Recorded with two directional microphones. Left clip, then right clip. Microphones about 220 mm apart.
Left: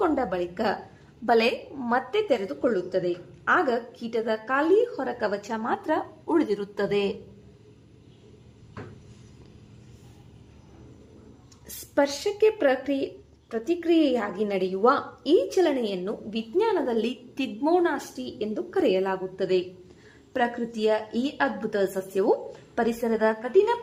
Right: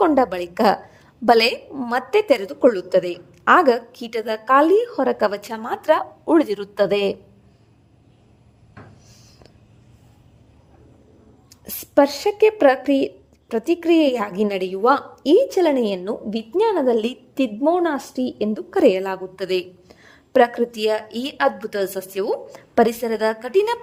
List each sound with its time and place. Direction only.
0.0 s speech: 45° right (ahead or behind)
11.6 s speech: 45° right (ahead or behind)